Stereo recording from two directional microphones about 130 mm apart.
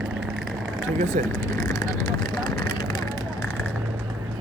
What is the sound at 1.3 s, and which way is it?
Vehicle, 25° left (ahead or behind).